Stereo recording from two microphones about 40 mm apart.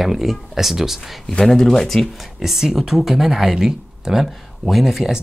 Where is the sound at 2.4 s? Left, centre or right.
Centre.